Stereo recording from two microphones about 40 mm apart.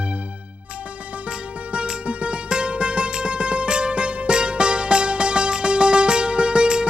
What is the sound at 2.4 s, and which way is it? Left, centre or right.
Music, right.